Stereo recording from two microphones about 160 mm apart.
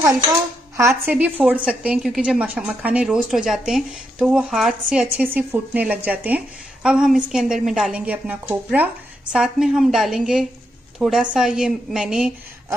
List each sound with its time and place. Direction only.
0.0 s dishes: 20° right (ahead or behind)
1.1 s a woman's voice: 10° right (ahead or behind)
4.9 s a woman's voice: 10° right (ahead or behind)